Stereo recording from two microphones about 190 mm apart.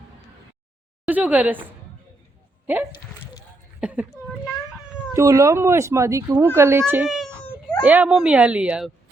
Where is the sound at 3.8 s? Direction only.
5° right (ahead or behind).